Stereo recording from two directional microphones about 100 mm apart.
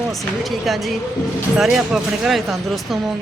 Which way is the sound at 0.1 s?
Centre (ahead or behind).